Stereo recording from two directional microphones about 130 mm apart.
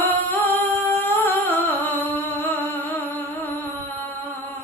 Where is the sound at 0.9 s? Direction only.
15° left (ahead or behind).